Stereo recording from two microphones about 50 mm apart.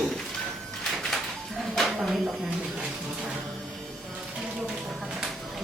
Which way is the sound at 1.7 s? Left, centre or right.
Centre.